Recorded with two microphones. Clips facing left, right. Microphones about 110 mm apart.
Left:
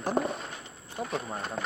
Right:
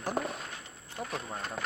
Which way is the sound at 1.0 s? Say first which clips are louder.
Left 4 dB; 20° left (ahead or behind).